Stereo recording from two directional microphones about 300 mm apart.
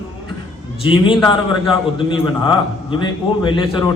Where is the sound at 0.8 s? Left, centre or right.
Centre.